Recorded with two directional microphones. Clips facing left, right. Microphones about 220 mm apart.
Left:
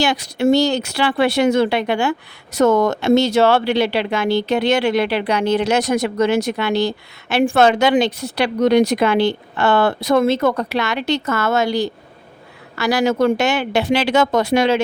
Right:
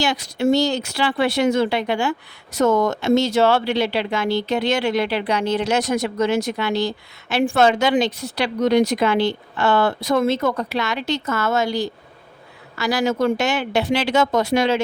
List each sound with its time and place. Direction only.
0.0 s speech: 65° left (ahead or behind)